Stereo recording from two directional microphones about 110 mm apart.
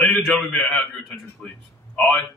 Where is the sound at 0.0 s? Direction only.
Centre (ahead or behind).